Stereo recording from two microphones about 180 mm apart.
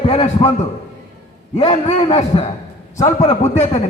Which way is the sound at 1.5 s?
35° left (ahead or behind).